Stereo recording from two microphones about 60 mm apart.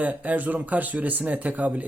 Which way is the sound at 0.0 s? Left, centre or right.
Right.